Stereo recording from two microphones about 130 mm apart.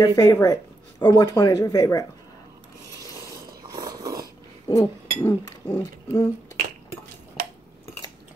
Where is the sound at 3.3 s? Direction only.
30° right (ahead or behind).